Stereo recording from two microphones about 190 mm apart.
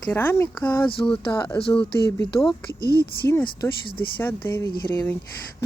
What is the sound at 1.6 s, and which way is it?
Speech, 25° left (ahead or behind).